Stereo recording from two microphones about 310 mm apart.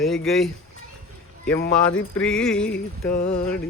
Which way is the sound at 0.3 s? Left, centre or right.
Centre.